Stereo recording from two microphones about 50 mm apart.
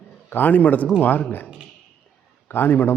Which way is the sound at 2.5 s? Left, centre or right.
Left.